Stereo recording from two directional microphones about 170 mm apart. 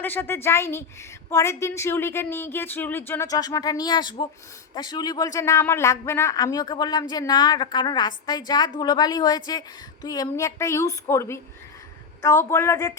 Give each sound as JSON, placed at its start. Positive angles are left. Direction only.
{"t": 0.0, "sound": "a woman's voice", "side_deg": 10}